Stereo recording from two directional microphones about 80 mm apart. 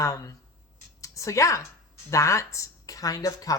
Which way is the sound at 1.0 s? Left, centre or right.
Left.